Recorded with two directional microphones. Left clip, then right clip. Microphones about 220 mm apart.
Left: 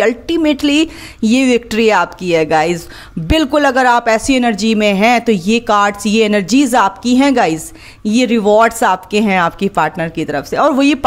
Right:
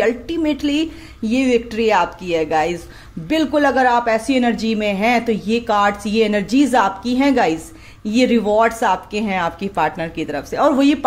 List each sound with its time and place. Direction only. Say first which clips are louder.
0.0 s a woman's voice: left 5 dB; 30° left (ahead or behind)